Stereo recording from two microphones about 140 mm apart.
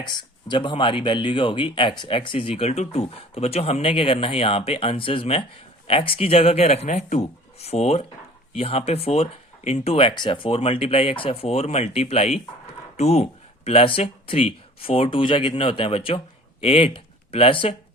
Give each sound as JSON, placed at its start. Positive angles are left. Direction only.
{"t": 0.0, "sound": "speech", "side_deg": 35}